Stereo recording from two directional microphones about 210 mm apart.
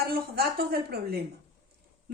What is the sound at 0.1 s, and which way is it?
A woman's voice, 50° right (ahead or behind).